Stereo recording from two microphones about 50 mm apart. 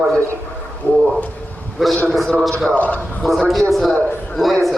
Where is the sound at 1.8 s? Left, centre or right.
Centre.